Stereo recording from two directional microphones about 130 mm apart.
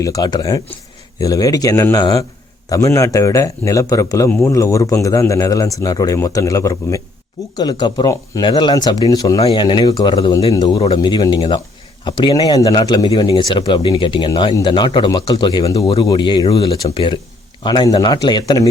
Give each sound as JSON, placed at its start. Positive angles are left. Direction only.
{"t": 0.0, "sound": "a man's voice", "side_deg": 30}
{"t": 9.4, "sound": "speech", "side_deg": 40}